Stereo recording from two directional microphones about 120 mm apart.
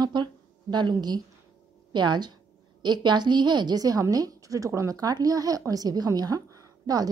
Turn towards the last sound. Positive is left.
turn(degrees=-30)  # may be behind; listen again after turning